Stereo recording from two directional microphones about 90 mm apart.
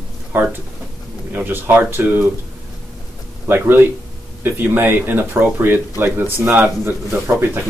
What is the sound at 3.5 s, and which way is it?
Speech, 20° right (ahead or behind).